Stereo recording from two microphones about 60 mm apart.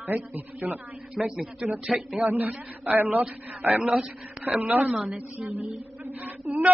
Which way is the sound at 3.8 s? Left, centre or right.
Centre.